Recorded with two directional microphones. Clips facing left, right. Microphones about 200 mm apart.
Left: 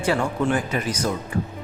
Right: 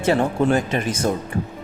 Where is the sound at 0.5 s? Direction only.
25° right (ahead or behind).